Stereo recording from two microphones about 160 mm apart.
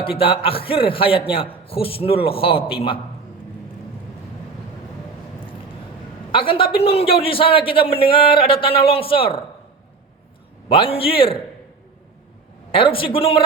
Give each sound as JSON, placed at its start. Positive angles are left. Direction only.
{"t": 0.0, "sound": "a man's voice", "side_deg": 35}
{"t": 6.3, "sound": "a man's voice", "side_deg": 30}
{"t": 10.7, "sound": "a man's voice", "side_deg": 35}
{"t": 12.7, "sound": "a man's voice", "side_deg": 35}